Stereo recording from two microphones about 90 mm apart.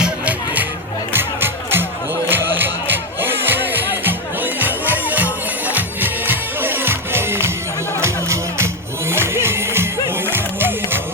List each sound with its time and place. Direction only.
0.0 s music: 15° right (ahead or behind)